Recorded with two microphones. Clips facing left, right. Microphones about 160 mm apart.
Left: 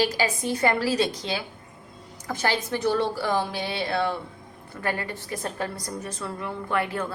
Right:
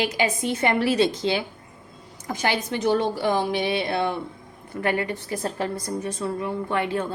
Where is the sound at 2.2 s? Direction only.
15° right (ahead or behind).